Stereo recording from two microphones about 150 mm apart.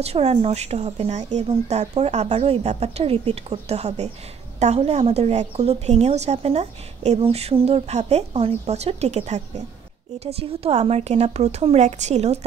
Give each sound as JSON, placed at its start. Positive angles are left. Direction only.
{"t": 0.0, "sound": "a woman's voice", "side_deg": -45}